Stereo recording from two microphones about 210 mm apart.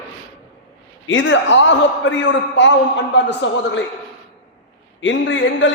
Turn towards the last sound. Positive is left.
turn(degrees=65)  # may be behind; listen again after turning